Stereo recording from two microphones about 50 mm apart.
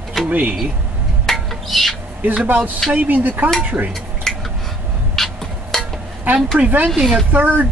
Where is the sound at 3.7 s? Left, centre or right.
Centre.